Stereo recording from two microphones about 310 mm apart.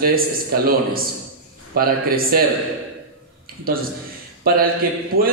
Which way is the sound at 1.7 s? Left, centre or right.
Right.